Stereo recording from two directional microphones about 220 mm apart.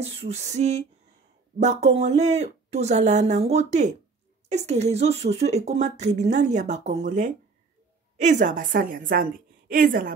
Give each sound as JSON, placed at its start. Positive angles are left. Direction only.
{"t": 0.0, "sound": "speech", "side_deg": -25}